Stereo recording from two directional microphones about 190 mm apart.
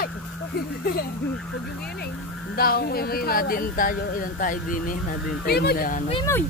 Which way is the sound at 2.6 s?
50° left (ahead or behind).